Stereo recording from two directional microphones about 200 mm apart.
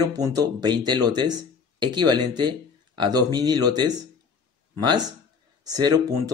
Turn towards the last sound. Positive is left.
turn(degrees=-20)  # may be behind; listen again after turning